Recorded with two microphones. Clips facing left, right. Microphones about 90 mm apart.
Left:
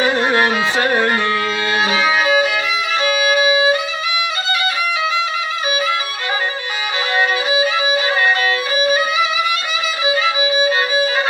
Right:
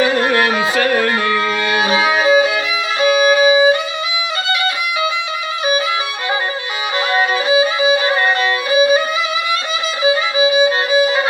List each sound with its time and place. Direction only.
0.3 s music: 25° left (ahead or behind)
1.8 s violin: 20° right (ahead or behind)
3.0 s violin: 35° right (ahead or behind)
7.4 s violin: 30° right (ahead or behind)
10.0 s violin: 30° right (ahead or behind)